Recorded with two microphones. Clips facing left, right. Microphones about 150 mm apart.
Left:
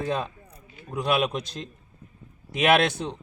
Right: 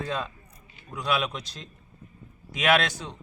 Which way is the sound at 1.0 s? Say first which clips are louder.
Left 4 dB; 50° left (ahead or behind).